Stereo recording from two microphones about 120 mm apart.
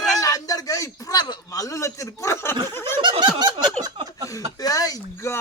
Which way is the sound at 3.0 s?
40° right (ahead or behind).